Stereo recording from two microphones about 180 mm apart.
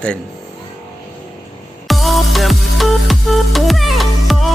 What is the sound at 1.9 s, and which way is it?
Music, centre (ahead or behind).